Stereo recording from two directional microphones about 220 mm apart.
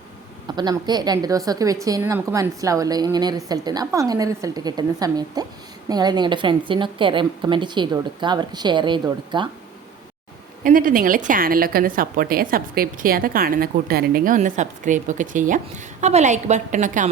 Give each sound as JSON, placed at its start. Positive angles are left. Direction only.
{"t": 0.4, "sound": "a woman's voice", "side_deg": -20}
{"t": 10.6, "sound": "a woman's voice", "side_deg": -40}